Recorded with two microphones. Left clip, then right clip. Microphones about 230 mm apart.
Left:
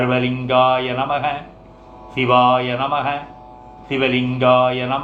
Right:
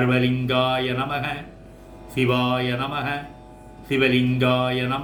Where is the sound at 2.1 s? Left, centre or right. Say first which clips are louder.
Left 8 dB; right.